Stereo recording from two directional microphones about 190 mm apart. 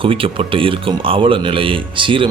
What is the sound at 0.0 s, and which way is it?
A man's voice, 30° right (ahead or behind).